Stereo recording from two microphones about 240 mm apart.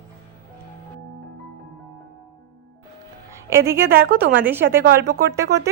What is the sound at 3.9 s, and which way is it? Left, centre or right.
Speech, right.